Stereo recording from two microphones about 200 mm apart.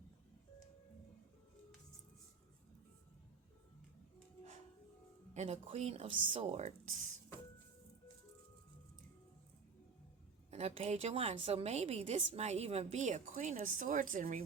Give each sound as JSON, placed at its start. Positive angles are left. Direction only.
{"t": 5.3, "sound": "a woman's voice", "side_deg": -30}
{"t": 10.5, "sound": "a woman's voice", "side_deg": -30}